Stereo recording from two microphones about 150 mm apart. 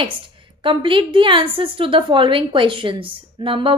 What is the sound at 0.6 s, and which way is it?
A woman's voice, 35° right (ahead or behind).